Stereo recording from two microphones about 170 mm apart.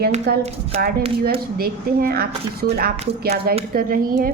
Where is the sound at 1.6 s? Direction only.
60° right (ahead or behind).